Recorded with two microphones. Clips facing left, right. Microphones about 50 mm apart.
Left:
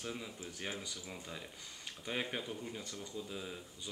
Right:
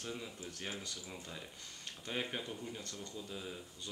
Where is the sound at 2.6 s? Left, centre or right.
Centre.